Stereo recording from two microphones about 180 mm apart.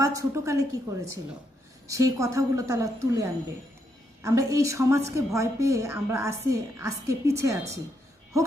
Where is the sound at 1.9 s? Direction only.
20° right (ahead or behind).